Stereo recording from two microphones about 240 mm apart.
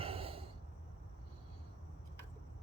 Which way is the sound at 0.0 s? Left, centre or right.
Right.